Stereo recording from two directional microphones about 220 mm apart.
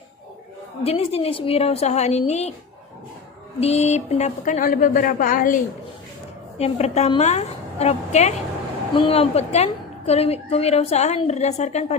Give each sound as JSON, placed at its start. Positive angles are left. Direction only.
{"t": 0.9, "sound": "a woman's voice", "side_deg": 25}
{"t": 3.6, "sound": "a woman's voice", "side_deg": 30}
{"t": 6.6, "sound": "a woman's voice", "side_deg": 30}